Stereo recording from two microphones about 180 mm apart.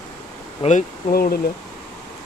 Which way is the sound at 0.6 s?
40° left (ahead or behind).